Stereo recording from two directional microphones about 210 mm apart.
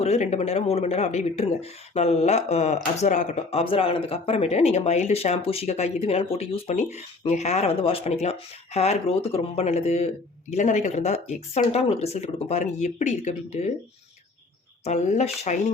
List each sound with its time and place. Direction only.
0.0 s speech: 30° left (ahead or behind)
14.8 s speech: 35° left (ahead or behind)